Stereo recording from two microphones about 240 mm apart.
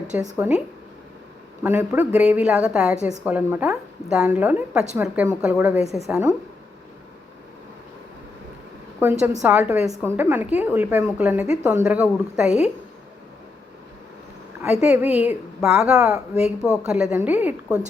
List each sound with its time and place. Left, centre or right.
0.3 s a woman's voice: centre
1.6 s a woman's voice: centre
9.4 s a woman's voice: centre
12.5 s a woman's voice: left
14.6 s a woman's voice: centre